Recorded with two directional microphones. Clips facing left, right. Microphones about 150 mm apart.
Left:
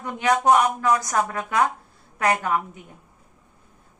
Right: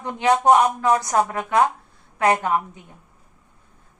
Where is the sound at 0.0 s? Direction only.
25° right (ahead or behind).